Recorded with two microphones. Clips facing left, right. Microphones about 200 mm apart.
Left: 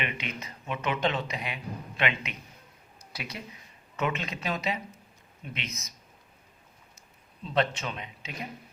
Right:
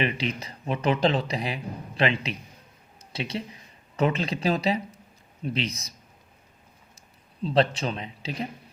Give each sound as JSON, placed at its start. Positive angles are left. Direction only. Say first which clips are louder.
{"t": 0.0, "sound": "speech", "louder": "right 8 dB", "side_deg": -35}
{"t": 7.4, "sound": "speech", "louder": "right 5 dB", "side_deg": -35}